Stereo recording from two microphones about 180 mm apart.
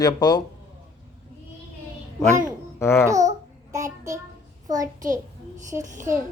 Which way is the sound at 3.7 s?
15° right (ahead or behind).